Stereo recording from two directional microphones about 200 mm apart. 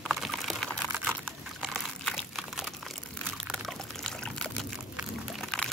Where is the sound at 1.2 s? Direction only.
Centre (ahead or behind).